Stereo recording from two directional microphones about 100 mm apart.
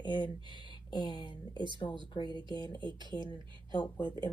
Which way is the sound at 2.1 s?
50° left (ahead or behind).